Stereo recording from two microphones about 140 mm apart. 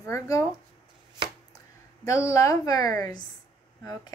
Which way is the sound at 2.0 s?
20° left (ahead or behind).